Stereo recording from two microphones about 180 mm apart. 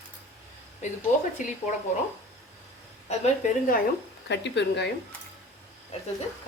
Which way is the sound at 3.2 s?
50° left (ahead or behind).